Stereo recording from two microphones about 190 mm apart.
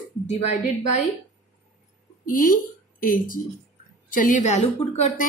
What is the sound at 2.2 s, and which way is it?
A woman's voice, 45° left (ahead or behind).